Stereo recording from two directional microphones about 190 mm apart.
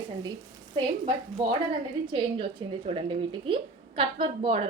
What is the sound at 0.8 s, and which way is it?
A woman's voice, 25° right (ahead or behind).